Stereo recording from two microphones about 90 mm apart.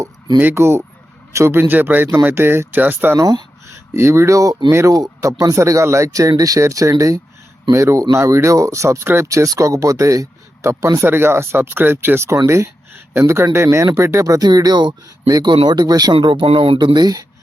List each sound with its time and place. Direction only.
0.3 s speech: 25° right (ahead or behind)
3.2 s a sound: 40° right (ahead or behind)
3.9 s speech: 30° right (ahead or behind); by 16.1 s 45° right (ahead or behind)
16.1 s speech: 75° right (ahead or behind); by 17.2 s 50° right (ahead or behind)